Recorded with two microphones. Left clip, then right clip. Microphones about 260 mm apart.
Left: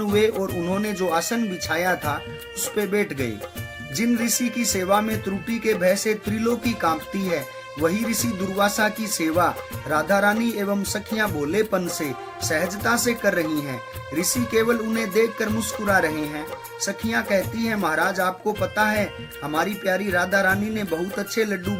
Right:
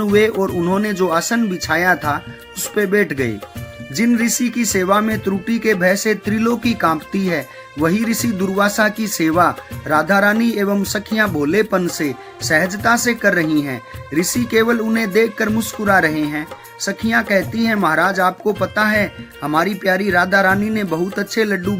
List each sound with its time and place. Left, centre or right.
0.0 s speech: centre